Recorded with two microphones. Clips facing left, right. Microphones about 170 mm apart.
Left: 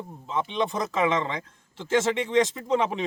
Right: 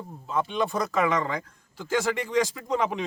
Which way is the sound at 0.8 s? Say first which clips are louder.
Even; 20° left (ahead or behind).